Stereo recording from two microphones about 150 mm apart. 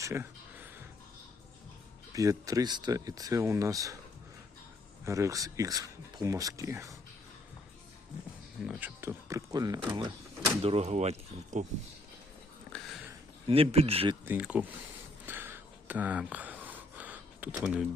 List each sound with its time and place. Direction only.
0.0 s a sound: 15° right (ahead or behind)
2.1 s speech: 20° right (ahead or behind)
5.0 s speech: 20° right (ahead or behind)
8.6 s speech: 15° right (ahead or behind)
10.6 s speech: 45° right (ahead or behind)
12.7 s a sound: centre (ahead or behind)
13.5 s speech: 40° right (ahead or behind)
14.3 s speech: 10° right (ahead or behind)
15.3 s gasp: 15° right (ahead or behind)